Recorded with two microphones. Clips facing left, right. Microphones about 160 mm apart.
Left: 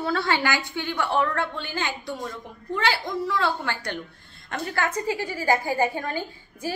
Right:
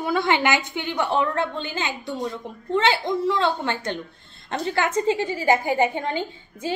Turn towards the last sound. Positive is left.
turn(degrees=-20)  # may be behind; listen again after turning